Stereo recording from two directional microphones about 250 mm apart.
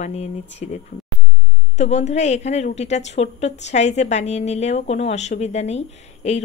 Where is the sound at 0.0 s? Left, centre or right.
Left.